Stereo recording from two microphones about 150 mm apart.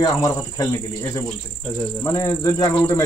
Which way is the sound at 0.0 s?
25° left (ahead or behind).